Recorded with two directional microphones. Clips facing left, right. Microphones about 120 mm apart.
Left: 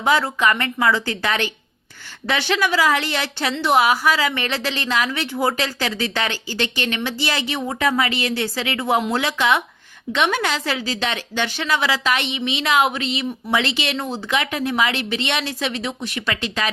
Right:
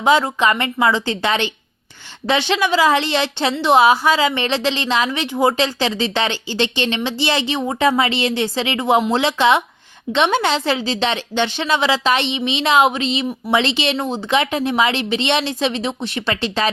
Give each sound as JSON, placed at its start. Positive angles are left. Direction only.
{"t": 0.0, "sound": "a woman's voice", "side_deg": -20}